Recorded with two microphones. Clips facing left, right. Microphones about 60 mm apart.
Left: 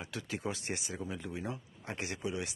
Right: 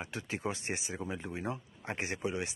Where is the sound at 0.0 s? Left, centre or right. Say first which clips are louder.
Right 1 dB; right.